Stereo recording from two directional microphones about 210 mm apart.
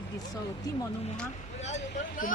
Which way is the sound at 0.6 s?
15° left (ahead or behind).